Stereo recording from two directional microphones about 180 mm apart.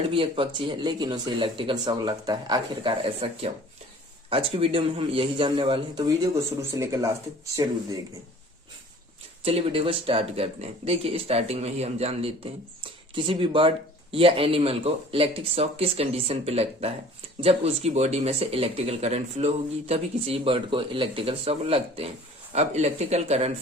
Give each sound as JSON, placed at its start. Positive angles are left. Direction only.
{"t": 0.1, "sound": "speech", "side_deg": -30}
{"t": 6.0, "sound": "speech", "side_deg": -15}
{"t": 9.4, "sound": "speech", "side_deg": -35}